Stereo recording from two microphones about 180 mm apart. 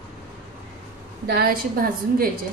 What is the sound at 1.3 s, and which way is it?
Speech, 55° right (ahead or behind).